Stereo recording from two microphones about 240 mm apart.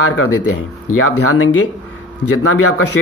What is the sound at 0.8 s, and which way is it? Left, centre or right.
Speech, left.